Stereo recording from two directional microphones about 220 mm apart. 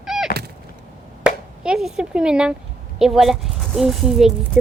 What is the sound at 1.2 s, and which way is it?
A woman's voice, 5° right (ahead or behind).